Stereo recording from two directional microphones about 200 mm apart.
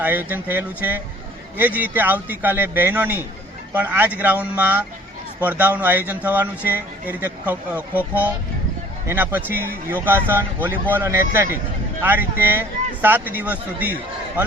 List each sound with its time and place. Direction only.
0.0 s speech: 10° right (ahead or behind)